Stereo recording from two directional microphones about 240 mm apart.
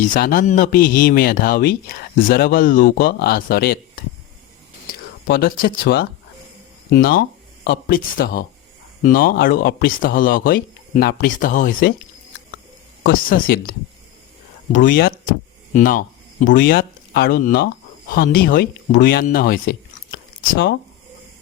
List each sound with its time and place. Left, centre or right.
0.1 s speech: left
5.3 s speech: left
13.0 s speech: left